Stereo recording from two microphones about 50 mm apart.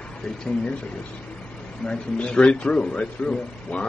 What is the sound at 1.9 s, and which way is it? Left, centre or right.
A man's voice, centre.